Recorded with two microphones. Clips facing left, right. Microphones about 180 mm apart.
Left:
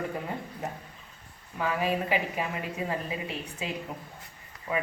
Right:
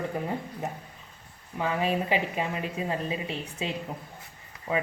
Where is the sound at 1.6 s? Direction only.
25° right (ahead or behind).